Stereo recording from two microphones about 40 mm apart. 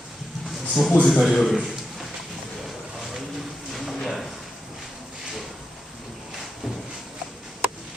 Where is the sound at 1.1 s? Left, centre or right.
Centre.